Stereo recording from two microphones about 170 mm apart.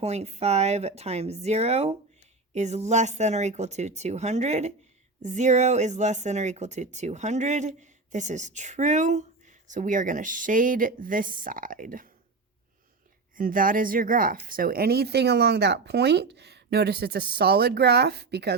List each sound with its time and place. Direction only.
0.0 s speech: 40° right (ahead or behind); by 12.0 s 55° right (ahead or behind)
13.3 s speech: 55° right (ahead or behind); by 18.5 s 75° right (ahead or behind)